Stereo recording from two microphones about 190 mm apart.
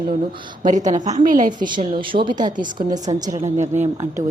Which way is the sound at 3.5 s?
40° right (ahead or behind).